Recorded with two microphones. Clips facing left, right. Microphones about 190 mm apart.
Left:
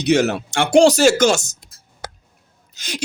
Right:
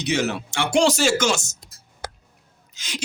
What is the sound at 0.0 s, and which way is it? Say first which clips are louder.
Speech: left 7 dB; 65° left (ahead or behind).